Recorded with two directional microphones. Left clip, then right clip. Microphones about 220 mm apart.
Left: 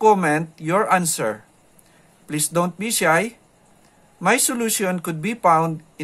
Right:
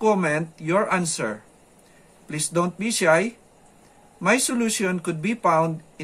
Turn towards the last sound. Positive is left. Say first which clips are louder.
# left 3 dB
turn(degrees=45)  # may be behind; listen again after turning